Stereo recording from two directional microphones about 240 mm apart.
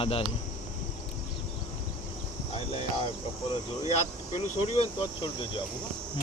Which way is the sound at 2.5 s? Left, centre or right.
Left.